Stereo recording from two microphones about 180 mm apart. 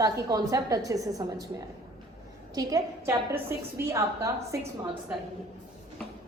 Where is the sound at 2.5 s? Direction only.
15° right (ahead or behind).